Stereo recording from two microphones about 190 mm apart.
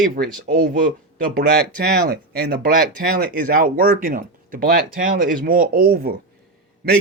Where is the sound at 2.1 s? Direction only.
55° right (ahead or behind).